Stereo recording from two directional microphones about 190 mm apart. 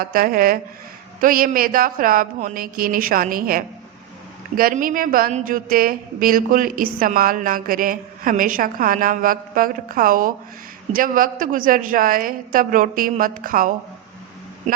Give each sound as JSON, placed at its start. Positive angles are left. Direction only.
{"t": 0.0, "sound": "a woman's voice", "side_deg": -50}